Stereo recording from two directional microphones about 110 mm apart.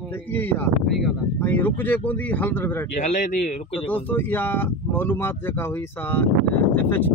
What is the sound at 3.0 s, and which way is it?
Speech, 90° left.